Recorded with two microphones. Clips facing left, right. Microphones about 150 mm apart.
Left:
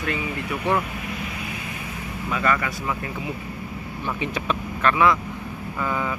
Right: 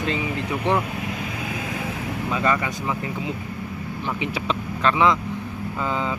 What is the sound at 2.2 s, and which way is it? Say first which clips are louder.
Speech: right 1 dB; 20° right (ahead or behind).